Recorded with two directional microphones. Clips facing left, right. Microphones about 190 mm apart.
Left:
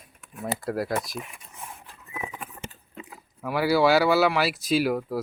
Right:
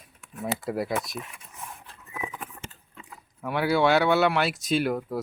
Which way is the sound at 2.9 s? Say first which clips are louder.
Left 5 dB; 20° left (ahead or behind).